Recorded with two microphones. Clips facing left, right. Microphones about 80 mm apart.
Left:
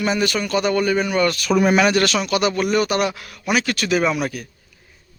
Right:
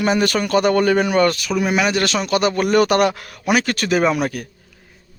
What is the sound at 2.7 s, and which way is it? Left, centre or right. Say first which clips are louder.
Speech: right 4 dB; right.